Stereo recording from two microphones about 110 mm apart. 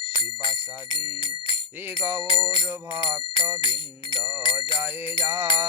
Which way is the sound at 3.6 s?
50° left (ahead or behind).